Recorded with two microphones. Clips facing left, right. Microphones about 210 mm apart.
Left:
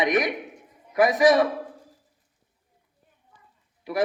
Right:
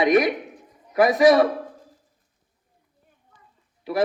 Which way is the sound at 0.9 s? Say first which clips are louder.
Right 3 dB; 30° right (ahead or behind).